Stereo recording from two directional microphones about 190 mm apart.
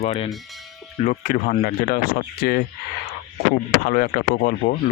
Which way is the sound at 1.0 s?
50° left (ahead or behind).